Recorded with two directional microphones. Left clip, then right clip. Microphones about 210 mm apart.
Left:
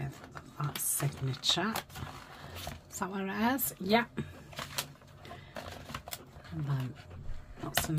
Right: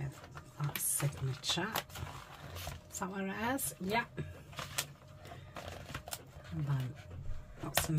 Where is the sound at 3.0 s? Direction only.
10° left (ahead or behind).